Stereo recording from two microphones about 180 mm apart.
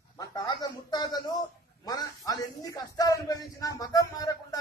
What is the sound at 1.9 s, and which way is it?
A man's voice, 20° left (ahead or behind).